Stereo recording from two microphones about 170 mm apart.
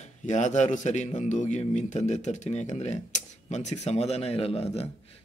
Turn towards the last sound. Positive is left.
turn(degrees=35)  # may be behind; listen again after turning